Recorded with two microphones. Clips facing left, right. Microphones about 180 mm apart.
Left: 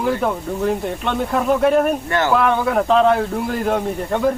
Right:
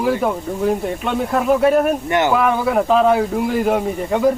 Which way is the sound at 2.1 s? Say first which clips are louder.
Right 3 dB; 20° right (ahead or behind).